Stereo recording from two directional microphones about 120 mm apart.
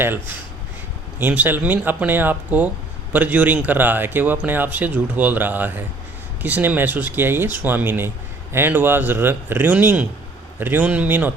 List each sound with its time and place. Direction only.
0.0 s speech: 15° right (ahead or behind)